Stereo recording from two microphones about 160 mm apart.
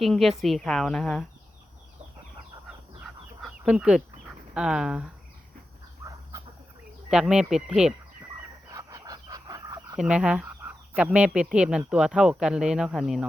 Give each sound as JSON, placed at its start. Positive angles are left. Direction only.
{"t": 0.0, "sound": "speech", "side_deg": 0}
{"t": 3.4, "sound": "chicken", "side_deg": -5}
{"t": 4.5, "sound": "speech", "side_deg": -5}
{"t": 7.1, "sound": "speech", "side_deg": -5}
{"t": 8.7, "sound": "a sound", "side_deg": -20}
{"t": 10.0, "sound": "speech", "side_deg": -5}